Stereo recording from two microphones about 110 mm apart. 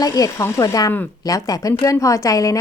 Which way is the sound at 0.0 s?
35° left (ahead or behind).